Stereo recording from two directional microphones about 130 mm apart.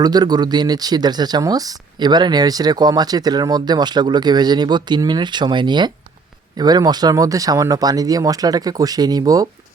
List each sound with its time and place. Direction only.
0.0 s speech: 30° right (ahead or behind)